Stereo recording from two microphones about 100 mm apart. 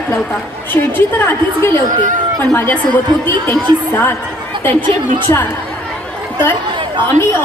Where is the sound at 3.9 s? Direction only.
20° left (ahead or behind).